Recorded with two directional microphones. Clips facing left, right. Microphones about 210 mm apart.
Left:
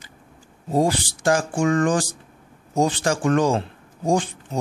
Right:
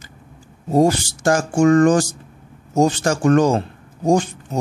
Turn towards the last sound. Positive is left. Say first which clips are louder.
# right 4 dB
turn(degrees=-40)  # may be behind; listen again after turning